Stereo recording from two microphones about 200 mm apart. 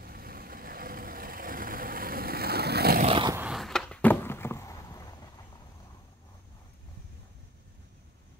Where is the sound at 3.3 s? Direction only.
5° right (ahead or behind); by 5.3 s 20° left (ahead or behind).